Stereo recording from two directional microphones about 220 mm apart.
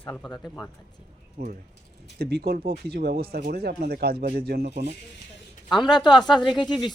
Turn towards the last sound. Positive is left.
turn(degrees=20)  # may be behind; listen again after turning